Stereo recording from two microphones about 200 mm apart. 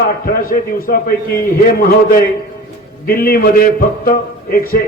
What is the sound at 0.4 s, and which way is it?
Speech, 45° left (ahead or behind).